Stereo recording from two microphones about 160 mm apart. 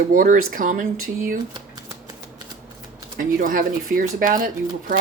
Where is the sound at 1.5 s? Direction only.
25° right (ahead or behind).